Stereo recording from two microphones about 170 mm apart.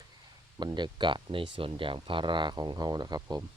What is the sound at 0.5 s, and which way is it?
Speech, 25° right (ahead or behind).